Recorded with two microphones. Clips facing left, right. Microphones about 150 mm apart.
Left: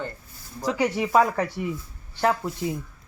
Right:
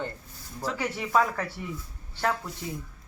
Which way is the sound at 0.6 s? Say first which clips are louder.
Left 7 dB; 15° left (ahead or behind).